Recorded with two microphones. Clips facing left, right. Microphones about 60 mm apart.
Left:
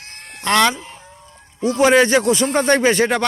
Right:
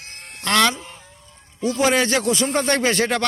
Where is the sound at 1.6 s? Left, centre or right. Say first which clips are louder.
Left 5 dB; left.